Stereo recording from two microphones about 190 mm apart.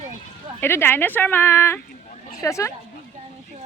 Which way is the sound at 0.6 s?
10° left (ahead or behind).